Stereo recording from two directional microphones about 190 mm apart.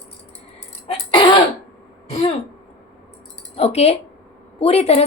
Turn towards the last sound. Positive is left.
turn(degrees=35)  # may be behind; listen again after turning